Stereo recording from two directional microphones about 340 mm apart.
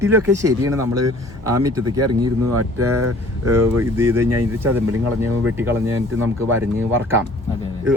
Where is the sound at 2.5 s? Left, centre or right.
Right.